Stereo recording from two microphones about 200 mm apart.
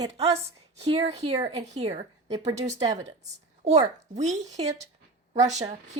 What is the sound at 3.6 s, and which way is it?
Speech, 35° right (ahead or behind).